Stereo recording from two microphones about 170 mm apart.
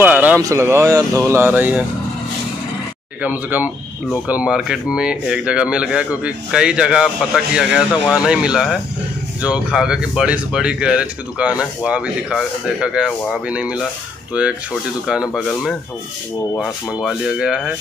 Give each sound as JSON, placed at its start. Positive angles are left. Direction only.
{"t": 0.0, "sound": "a sound", "side_deg": -10}
{"t": 0.4, "sound": "speech", "side_deg": -15}
{"t": 3.2, "sound": "speech", "side_deg": -10}
{"t": 17.0, "sound": "speech", "side_deg": 0}